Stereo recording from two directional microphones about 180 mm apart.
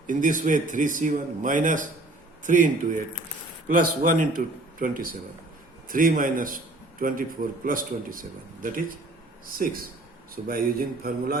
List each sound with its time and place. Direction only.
0.1 s a man's voice: 45° right (ahead or behind)
3.7 s a man's voice: 50° right (ahead or behind)